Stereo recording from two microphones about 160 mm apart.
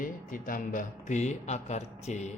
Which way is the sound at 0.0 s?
60° left (ahead or behind).